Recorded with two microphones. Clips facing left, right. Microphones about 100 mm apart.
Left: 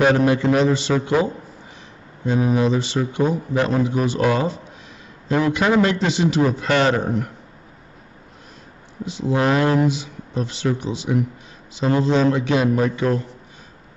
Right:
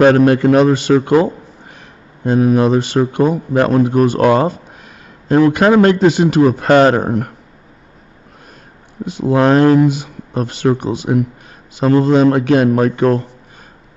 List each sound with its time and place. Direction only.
0.0 s a man's voice: 60° right (ahead or behind)
9.0 s a man's voice: 50° right (ahead or behind)